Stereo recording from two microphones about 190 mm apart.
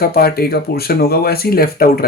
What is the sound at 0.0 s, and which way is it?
Speech, 55° left (ahead or behind).